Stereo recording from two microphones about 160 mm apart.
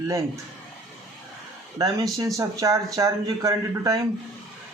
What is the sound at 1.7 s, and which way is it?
Speech, 25° right (ahead or behind).